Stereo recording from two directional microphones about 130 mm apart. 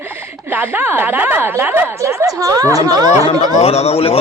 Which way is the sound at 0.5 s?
15° right (ahead or behind).